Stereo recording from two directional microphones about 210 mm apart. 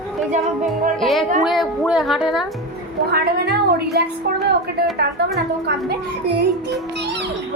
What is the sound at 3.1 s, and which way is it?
A woman's voice, 50° right (ahead or behind).